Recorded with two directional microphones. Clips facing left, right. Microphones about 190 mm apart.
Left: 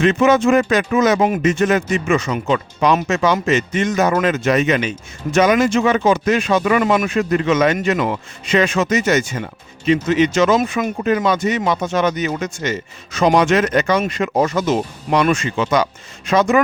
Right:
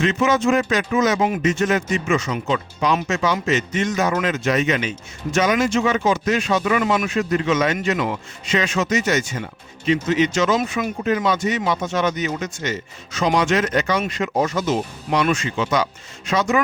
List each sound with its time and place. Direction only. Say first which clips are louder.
0.0 s speech: left 5 dB; 60° left (ahead or behind)